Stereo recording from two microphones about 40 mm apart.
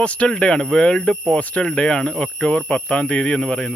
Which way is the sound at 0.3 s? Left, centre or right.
Left.